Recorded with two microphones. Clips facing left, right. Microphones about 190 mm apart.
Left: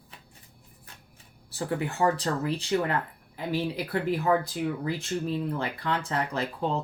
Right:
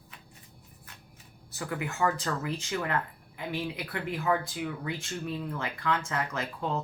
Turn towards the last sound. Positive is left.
turn(degrees=30)  # may be behind; listen again after turning